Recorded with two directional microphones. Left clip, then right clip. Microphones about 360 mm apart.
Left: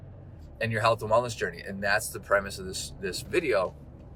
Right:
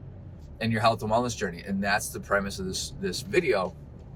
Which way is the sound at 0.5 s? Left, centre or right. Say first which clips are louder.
Right 1 dB; centre.